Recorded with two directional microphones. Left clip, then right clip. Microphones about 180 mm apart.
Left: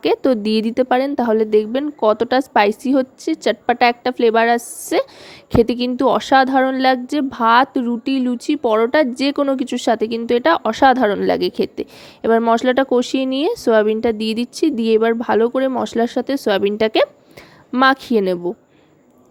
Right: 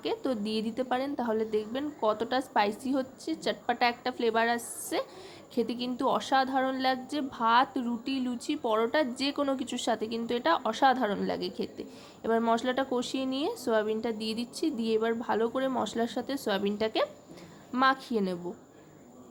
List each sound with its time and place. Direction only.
0.0 s a woman's voice: 50° left (ahead or behind)